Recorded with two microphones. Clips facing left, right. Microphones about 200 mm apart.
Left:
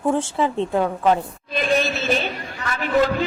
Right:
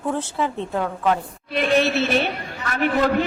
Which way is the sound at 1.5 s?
65° right (ahead or behind).